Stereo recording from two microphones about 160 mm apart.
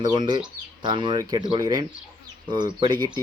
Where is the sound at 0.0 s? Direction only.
25° right (ahead or behind).